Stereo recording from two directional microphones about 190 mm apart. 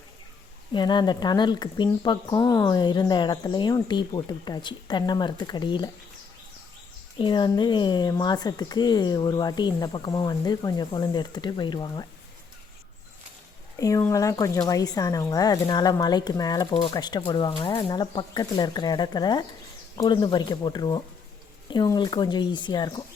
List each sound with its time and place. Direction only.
0.7 s speech: 25° left (ahead or behind)
7.2 s speech: 25° left (ahead or behind)
13.7 s speech: 15° left (ahead or behind)